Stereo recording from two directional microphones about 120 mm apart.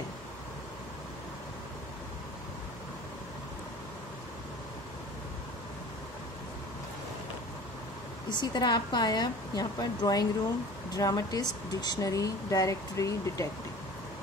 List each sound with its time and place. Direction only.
8.3 s a woman's voice: 35° left (ahead or behind)